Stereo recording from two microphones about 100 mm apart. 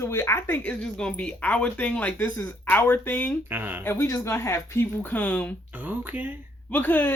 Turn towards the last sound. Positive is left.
turn(degrees=15)  # may be behind; listen again after turning